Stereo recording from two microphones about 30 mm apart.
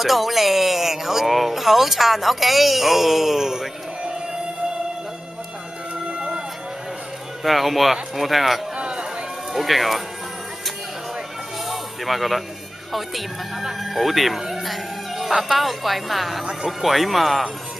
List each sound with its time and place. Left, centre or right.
0.0 s speech: centre
6.1 s vehicle: right
7.4 s speech: centre
8.7 s a sound: right
9.5 s speech: centre
11.6 s music: centre
12.9 s speech: centre